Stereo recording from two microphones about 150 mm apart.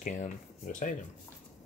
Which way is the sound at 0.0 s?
60° left (ahead or behind).